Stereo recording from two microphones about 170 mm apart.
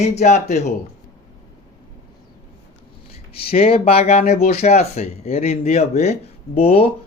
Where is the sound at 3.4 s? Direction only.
35° left (ahead or behind).